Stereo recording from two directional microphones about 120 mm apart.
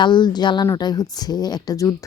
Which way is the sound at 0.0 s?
40° left (ahead or behind).